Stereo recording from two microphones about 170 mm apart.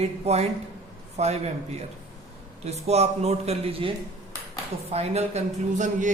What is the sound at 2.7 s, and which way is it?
A man's voice, 40° right (ahead or behind).